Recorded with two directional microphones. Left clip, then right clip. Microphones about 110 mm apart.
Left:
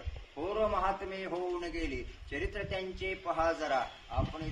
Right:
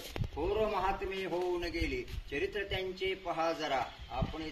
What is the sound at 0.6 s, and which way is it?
A man's voice, 25° left (ahead or behind).